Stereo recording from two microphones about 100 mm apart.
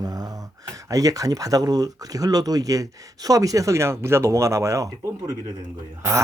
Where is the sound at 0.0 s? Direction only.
40° right (ahead or behind).